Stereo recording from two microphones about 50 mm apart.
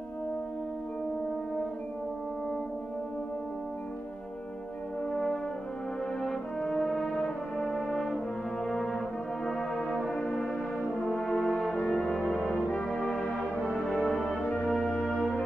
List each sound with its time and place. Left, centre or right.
5.1 s brass instrument: centre
7.2 s brass instrument: left
7.6 s brass instrument: centre
10.1 s music: left
10.9 s brass instrument: centre
11.8 s music: centre
12.8 s brass instrument: centre
14.6 s music: centre